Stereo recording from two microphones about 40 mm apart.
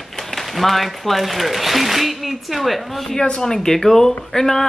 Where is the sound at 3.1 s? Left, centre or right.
Centre.